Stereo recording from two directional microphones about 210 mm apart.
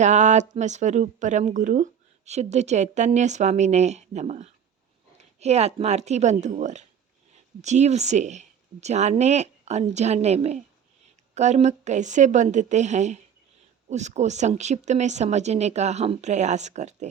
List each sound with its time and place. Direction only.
0.0 s speech: 35° right (ahead or behind)